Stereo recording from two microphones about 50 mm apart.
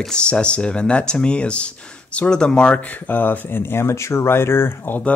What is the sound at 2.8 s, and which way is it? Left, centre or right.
Speech, left.